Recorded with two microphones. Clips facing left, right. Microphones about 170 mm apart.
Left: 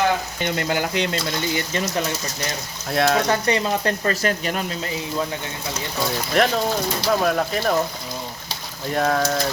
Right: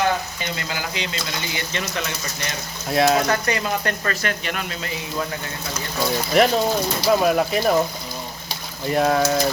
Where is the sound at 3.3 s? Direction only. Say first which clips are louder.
Left 2 dB; 30° left (ahead or behind).